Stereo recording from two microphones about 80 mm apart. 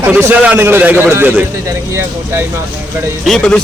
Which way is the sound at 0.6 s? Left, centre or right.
Right.